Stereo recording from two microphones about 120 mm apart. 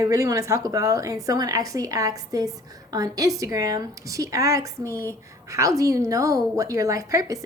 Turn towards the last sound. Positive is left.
turn(degrees=-30)  # may be behind; listen again after turning